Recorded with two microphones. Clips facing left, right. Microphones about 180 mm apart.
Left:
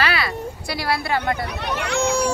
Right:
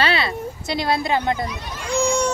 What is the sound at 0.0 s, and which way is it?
Speech, 25° right (ahead or behind).